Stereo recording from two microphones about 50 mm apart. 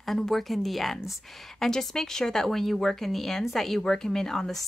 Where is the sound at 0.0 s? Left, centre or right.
Centre.